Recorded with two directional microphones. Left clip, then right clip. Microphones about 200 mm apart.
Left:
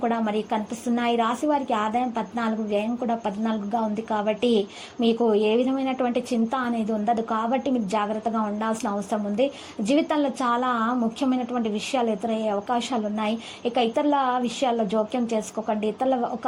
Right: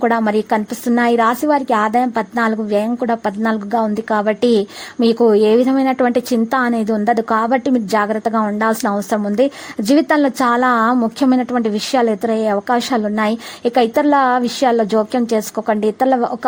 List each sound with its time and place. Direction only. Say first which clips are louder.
0.0 s a woman's voice: right 10 dB; 40° right (ahead or behind)